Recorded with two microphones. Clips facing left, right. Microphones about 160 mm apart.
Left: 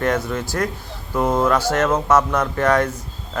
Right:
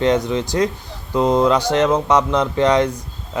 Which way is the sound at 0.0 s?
20° right (ahead or behind).